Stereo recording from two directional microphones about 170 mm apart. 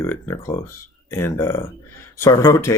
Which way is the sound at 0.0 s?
15° left (ahead or behind).